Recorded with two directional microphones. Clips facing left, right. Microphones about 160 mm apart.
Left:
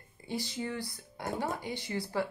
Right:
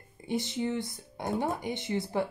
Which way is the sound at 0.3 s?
20° right (ahead or behind).